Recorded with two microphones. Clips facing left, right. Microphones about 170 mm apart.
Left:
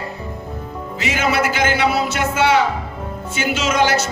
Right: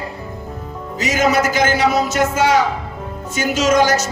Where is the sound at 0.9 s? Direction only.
40° right (ahead or behind).